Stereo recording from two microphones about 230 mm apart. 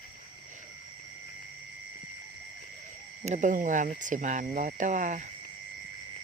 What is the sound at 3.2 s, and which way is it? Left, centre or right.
Speech, right.